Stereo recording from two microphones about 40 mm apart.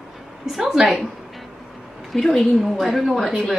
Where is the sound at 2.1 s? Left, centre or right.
Centre.